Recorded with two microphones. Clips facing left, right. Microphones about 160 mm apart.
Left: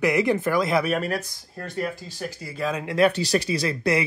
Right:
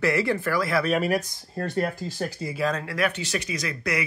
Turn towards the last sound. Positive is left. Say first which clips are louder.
# left 6 dB
turn(degrees=30)  # may be behind; listen again after turning